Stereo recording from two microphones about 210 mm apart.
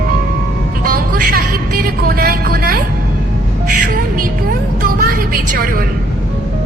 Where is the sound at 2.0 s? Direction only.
45° right (ahead or behind).